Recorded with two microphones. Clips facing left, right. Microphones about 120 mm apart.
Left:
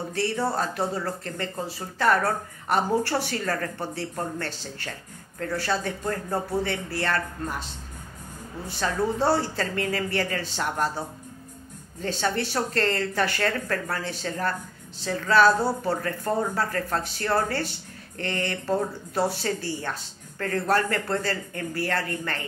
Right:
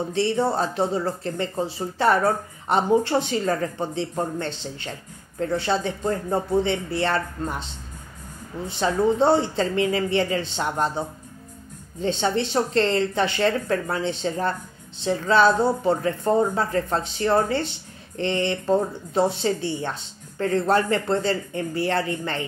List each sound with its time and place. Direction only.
0.1 s speech: 25° right (ahead or behind)